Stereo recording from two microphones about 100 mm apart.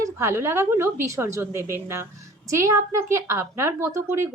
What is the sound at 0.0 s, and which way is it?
A woman's voice, 30° right (ahead or behind).